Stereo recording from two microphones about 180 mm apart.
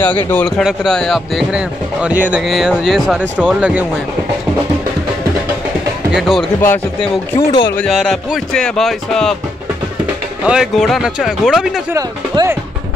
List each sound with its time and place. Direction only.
0.3 s speech: 10° left (ahead or behind); by 3.8 s 5° right (ahead or behind)
6.1 s speech: centre (ahead or behind)
6.6 s speech: 10° left (ahead or behind)
7.7 s speech: centre (ahead or behind)
10.4 s speech: 5° right (ahead or behind)
11.9 s speech: 15° right (ahead or behind)